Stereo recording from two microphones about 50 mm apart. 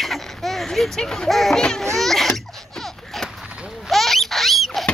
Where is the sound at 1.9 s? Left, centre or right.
Centre.